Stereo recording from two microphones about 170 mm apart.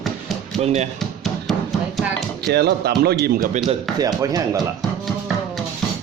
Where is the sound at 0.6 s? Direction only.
40° right (ahead or behind).